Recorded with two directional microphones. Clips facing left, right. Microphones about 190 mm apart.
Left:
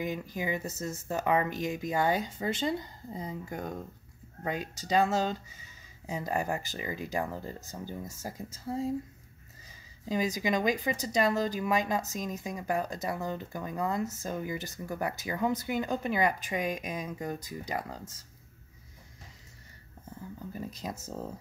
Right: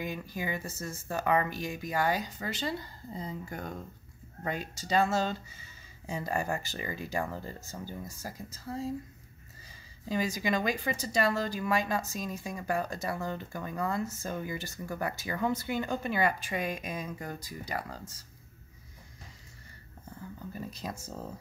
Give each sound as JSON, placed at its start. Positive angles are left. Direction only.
{"t": 0.0, "sound": "speech", "side_deg": 20}
{"t": 20.5, "sound": "speech", "side_deg": 20}